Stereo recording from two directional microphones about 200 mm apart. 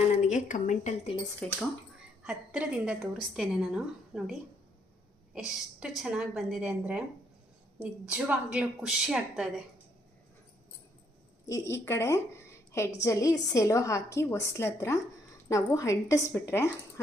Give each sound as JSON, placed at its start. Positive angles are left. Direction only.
{"t": 0.2, "sound": "a woman's voice", "side_deg": 35}
{"t": 1.4, "sound": "a woman's voice", "side_deg": 5}
{"t": 2.2, "sound": "a woman's voice", "side_deg": -5}
{"t": 5.8, "sound": "a woman's voice", "side_deg": 0}
{"t": 11.4, "sound": "a woman's voice", "side_deg": 15}